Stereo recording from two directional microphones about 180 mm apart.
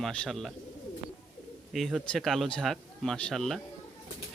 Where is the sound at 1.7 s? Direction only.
Centre (ahead or behind).